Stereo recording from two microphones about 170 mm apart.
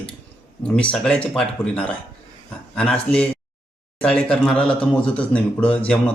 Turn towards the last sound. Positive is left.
turn(degrees=10)  # may be behind; listen again after turning